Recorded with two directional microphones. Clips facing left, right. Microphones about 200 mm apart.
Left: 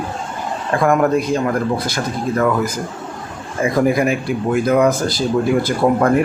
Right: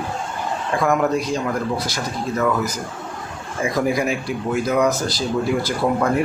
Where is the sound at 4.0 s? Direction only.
55° left (ahead or behind).